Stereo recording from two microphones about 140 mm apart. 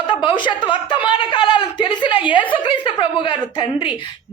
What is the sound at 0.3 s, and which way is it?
A woman's voice, 35° left (ahead or behind).